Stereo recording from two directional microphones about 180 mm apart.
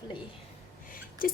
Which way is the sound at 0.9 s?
50° left (ahead or behind).